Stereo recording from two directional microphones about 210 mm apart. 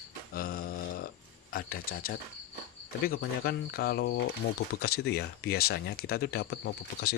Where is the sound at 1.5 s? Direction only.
45° left (ahead or behind).